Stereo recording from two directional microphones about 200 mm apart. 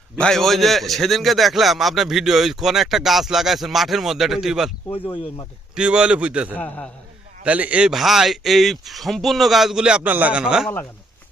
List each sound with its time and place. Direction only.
0.2 s a man's voice: centre (ahead or behind)
5.7 s a man's voice: 5° right (ahead or behind)
6.6 s a man's voice: 5° left (ahead or behind)
7.4 s a man's voice: 5° right (ahead or behind)